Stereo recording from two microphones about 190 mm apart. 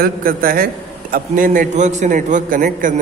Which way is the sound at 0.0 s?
50° right (ahead or behind).